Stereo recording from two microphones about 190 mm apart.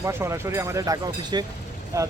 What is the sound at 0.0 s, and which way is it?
Speech, 15° right (ahead or behind).